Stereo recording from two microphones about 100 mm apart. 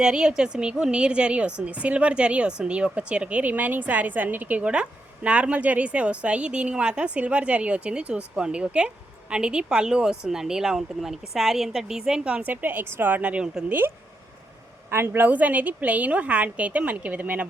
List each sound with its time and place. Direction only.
0.0 s a woman's voice: 10° right (ahead or behind)
13.7 s a woman's voice: 20° right (ahead or behind)